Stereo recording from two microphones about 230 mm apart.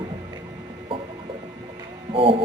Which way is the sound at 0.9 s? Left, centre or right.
Right.